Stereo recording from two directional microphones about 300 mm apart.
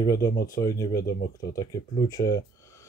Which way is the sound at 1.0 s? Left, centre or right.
Left.